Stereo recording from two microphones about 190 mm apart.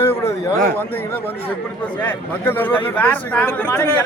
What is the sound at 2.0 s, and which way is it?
A man's voice, 10° left (ahead or behind).